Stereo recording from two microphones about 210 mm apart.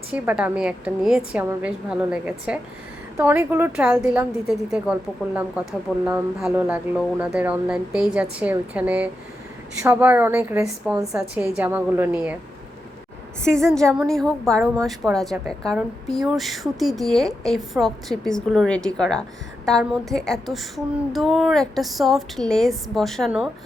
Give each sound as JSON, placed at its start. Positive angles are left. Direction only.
{"t": 0.1, "sound": "a woman's voice", "side_deg": -5}
{"t": 13.7, "sound": "speech", "side_deg": 0}